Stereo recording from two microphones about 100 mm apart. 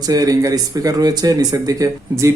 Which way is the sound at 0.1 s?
35° right (ahead or behind).